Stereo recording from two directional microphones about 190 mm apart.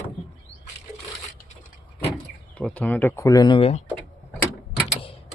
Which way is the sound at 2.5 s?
5° left (ahead or behind).